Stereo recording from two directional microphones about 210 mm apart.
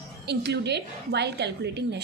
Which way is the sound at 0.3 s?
55° right (ahead or behind).